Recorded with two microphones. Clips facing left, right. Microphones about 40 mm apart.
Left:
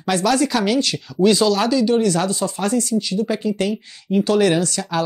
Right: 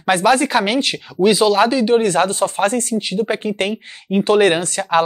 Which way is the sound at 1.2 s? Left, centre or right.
Centre.